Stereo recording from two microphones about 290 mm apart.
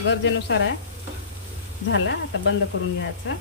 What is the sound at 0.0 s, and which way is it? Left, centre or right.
Sizzle, left.